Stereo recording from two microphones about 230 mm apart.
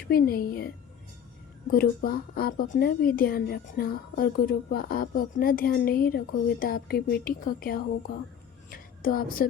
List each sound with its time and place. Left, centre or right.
0.1 s a woman's voice: left
1.7 s a woman's voice: left